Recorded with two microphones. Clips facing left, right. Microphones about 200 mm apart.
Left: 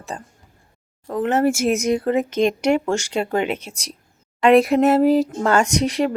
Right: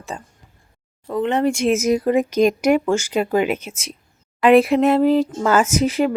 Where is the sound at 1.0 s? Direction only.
Centre (ahead or behind).